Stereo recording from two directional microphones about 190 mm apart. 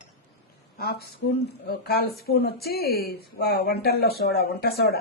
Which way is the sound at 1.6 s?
55° left (ahead or behind).